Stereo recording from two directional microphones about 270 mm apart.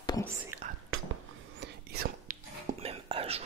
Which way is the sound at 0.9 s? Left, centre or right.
Right.